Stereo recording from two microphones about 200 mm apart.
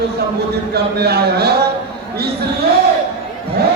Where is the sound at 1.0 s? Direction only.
55° right (ahead or behind).